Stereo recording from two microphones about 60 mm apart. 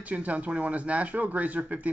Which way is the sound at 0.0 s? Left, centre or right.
Right.